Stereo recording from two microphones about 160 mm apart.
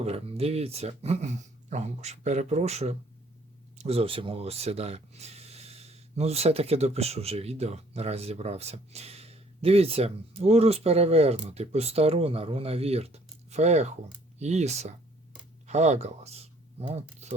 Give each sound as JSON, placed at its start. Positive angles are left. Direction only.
{"t": 0.0, "sound": "speech", "side_deg": -40}